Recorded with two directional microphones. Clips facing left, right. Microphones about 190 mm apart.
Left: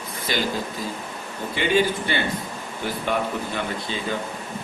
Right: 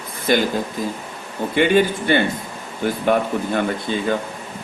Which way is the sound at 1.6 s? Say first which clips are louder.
Right 5 dB; 55° right (ahead or behind).